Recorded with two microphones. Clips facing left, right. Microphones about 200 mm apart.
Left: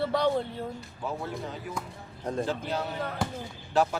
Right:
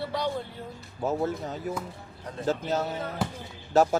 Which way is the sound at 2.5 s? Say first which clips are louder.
Right 4 dB; 45° right (ahead or behind).